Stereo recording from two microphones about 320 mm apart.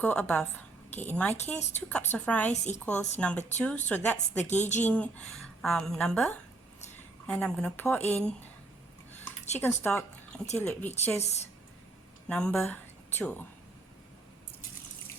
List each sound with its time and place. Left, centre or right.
0.0 s a woman's voice: centre
4.5 s speech: left
4.8 s a woman's voice: centre
9.6 s a woman's voice: centre
11.2 s speech: centre
12.3 s a woman's voice: centre